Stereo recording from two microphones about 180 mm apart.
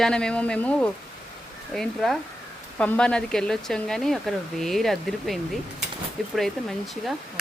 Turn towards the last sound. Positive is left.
turn(degrees=0)  # may be behind; listen again after turning